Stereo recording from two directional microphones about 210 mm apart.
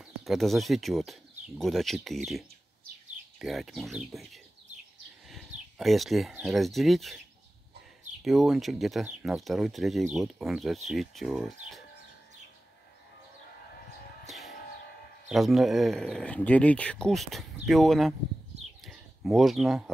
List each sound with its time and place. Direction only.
0.0 s speech: centre (ahead or behind)
3.3 s speech: centre (ahead or behind)
8.2 s speech: centre (ahead or behind)
14.2 s music: centre (ahead or behind)
15.3 s speech: centre (ahead or behind)
18.5 s a sound: 30° right (ahead or behind)
18.9 s speech: centre (ahead or behind)